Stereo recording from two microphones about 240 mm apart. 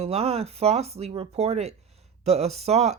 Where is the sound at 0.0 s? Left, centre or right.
Right.